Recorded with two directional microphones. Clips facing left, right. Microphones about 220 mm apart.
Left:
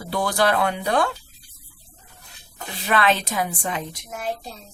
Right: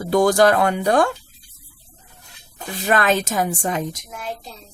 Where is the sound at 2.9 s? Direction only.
45° right (ahead or behind).